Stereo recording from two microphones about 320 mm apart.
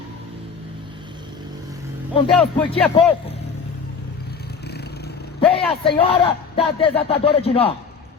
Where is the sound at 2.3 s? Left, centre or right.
Centre.